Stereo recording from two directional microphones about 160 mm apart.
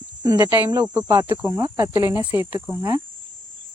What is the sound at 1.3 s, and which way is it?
Cricket, 10° right (ahead or behind).